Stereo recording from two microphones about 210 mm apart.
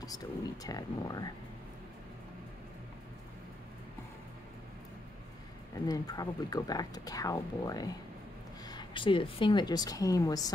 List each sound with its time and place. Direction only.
0.7 s speech: 15° left (ahead or behind)
5.9 s a woman's voice: 15° left (ahead or behind)